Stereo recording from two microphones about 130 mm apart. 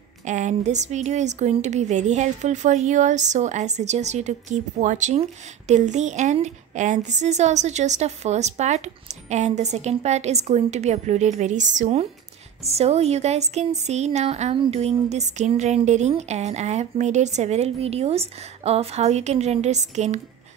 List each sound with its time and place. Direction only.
0.2 s a woman's voice: 65° right (ahead or behind)